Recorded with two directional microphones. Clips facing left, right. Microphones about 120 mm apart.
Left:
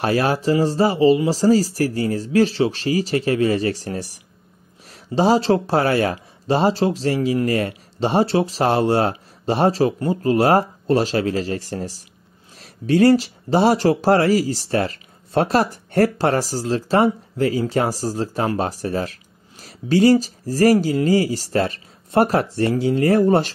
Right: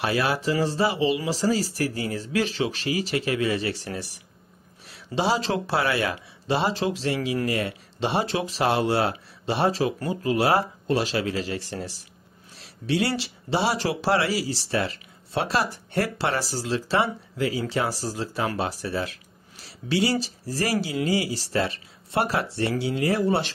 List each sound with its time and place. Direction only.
0.0 s speech: 40° left (ahead or behind)